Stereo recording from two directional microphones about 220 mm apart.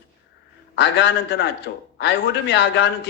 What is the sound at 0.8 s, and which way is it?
A man's voice, 55° left (ahead or behind).